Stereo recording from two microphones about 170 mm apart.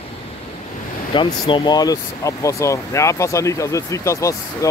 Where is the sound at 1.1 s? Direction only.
30° left (ahead or behind).